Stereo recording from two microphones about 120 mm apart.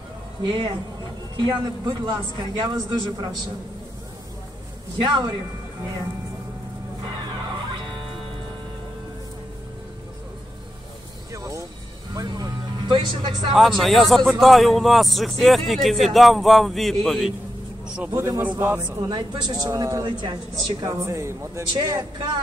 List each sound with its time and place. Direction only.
0.4 s a man's voice: 40° right (ahead or behind)
5.0 s a man's voice: 40° right (ahead or behind)
11.3 s music: 25° right (ahead or behind); by 13.5 s 45° right (ahead or behind)
13.5 s a man's voice: centre (ahead or behind)
18.1 s a man's voice: 20° right (ahead or behind)
19.0 s a man's voice: 35° right (ahead or behind)
20.1 s a man's voice: 40° right (ahead or behind); by 21.6 s 25° right (ahead or behind)
21.7 s a man's voice: 35° right (ahead or behind)